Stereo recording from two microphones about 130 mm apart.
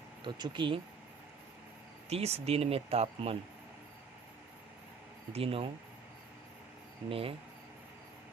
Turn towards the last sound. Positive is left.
turn(degrees=-45)  # may be behind; listen again after turning